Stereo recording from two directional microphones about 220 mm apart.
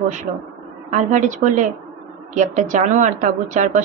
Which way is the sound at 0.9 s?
35° right (ahead or behind).